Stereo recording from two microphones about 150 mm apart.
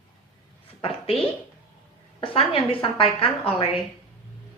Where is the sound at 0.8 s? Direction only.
40° left (ahead or behind).